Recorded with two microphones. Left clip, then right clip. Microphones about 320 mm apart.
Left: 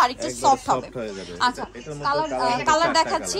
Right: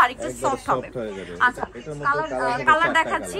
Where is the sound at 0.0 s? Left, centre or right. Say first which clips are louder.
Even; centre.